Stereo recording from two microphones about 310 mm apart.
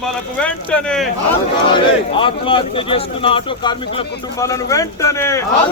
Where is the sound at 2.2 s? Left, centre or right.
Centre.